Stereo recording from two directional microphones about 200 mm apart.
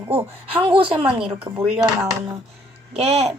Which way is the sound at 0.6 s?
25° right (ahead or behind).